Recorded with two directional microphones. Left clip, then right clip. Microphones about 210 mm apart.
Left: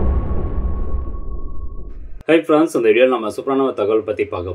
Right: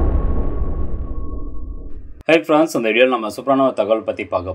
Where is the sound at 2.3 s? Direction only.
35° right (ahead or behind).